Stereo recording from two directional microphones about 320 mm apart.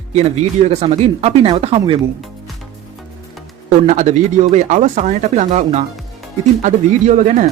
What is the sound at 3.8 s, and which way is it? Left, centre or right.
Speech, right.